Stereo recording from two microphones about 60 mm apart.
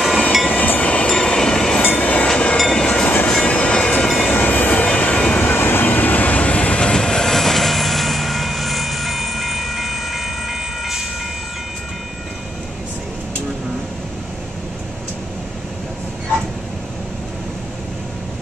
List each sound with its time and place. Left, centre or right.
0.5 s train: left
1.0 s train: centre
2.0 s train: left
2.9 s train: left
4.3 s train: left
5.5 s vehicle: left; by 11.1 s centre